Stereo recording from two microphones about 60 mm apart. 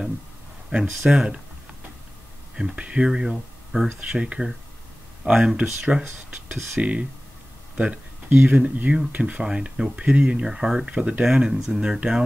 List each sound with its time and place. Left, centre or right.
0.7 s speech: centre
2.5 s speech: centre
4.1 s speech: centre